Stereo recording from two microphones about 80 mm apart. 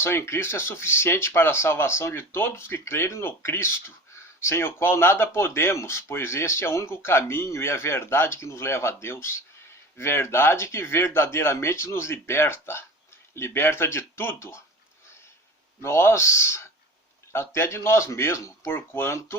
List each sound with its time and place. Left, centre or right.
0.0 s speech: left
15.8 s speech: left
18.7 s speech: left